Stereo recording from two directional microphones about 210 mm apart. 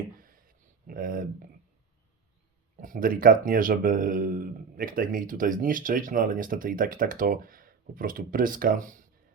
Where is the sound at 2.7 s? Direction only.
40° right (ahead or behind).